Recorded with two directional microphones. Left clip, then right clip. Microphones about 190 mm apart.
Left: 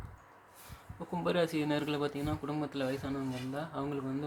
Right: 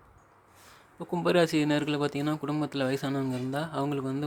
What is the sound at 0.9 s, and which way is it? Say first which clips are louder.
Speech: right 7 dB; 30° right (ahead or behind).